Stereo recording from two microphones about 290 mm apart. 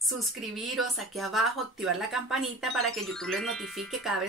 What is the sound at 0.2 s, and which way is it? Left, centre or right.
Speech, centre.